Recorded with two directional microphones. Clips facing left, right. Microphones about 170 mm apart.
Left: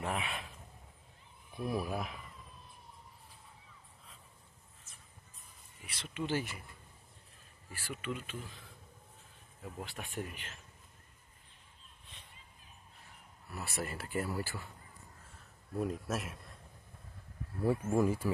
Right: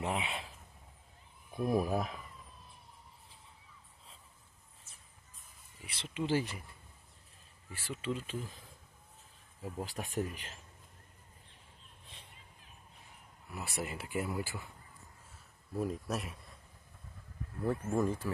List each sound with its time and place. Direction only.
0.0 s speech: 25° right (ahead or behind)
1.7 s speech: 45° right (ahead or behind)
5.9 s speech: 25° right (ahead or behind)
7.9 s speech: 30° right (ahead or behind)
9.6 s speech: 35° right (ahead or behind)
13.5 s speech: 15° right (ahead or behind)
15.7 s speech: centre (ahead or behind)
17.6 s speech: 5° left (ahead or behind)